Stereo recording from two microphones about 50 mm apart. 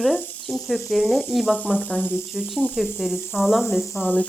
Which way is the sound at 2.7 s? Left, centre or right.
Centre.